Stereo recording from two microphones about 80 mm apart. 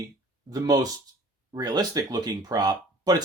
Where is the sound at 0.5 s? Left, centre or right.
Right.